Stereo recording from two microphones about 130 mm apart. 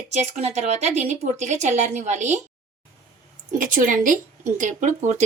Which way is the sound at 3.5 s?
90° right.